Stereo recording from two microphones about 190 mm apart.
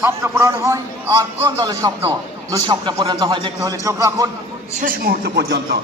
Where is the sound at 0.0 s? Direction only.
15° right (ahead or behind).